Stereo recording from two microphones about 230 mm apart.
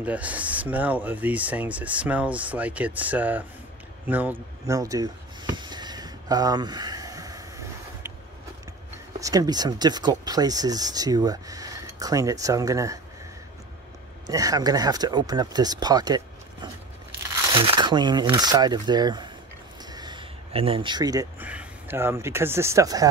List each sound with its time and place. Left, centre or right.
0.0 s speech: centre
4.1 s a sound: centre
9.2 s speech: centre
14.2 s speech: centre
17.6 s speech: right